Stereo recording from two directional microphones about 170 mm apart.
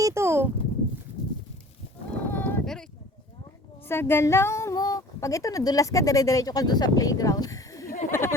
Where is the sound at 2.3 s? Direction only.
10° left (ahead or behind).